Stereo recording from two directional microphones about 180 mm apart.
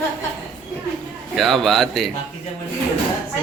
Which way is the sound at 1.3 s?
Centre (ahead or behind).